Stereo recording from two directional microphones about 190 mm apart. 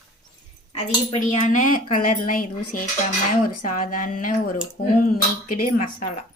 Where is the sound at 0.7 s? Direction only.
35° left (ahead or behind).